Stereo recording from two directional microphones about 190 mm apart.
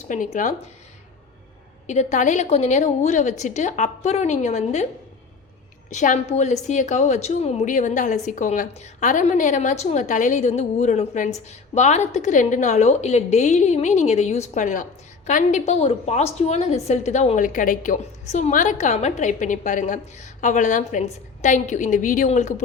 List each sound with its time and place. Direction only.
0.1 s a woman's voice: 40° left (ahead or behind)
1.9 s a woman's voice: 40° left (ahead or behind)
5.9 s a woman's voice: 40° left (ahead or behind)